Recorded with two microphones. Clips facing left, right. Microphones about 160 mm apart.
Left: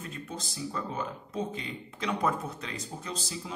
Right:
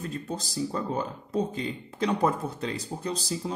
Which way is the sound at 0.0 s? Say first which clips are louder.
Right 6 dB; 35° right (ahead or behind).